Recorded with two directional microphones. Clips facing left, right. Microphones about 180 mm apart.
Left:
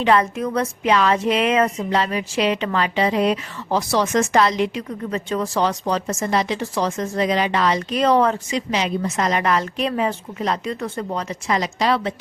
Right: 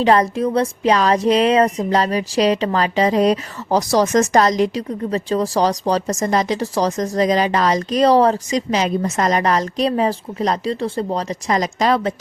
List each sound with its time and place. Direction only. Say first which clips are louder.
0.0 s speech: right 3 dB; 35° right (ahead or behind)